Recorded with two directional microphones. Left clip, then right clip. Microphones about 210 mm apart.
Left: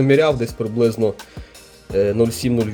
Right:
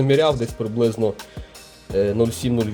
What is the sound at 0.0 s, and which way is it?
Speech, 10° left (ahead or behind).